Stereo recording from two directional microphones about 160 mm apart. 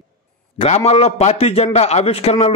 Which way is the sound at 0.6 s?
45° left (ahead or behind).